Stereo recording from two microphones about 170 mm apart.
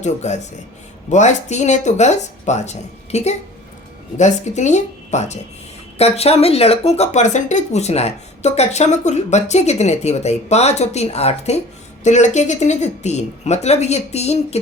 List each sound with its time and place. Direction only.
0.0 s speech: 45° left (ahead or behind)